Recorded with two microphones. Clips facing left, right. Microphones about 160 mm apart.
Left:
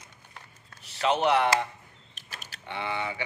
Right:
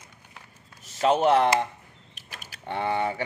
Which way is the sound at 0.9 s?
45° right (ahead or behind).